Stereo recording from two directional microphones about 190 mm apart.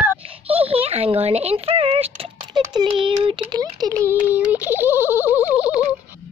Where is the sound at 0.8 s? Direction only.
30° right (ahead or behind); by 4.2 s 15° right (ahead or behind).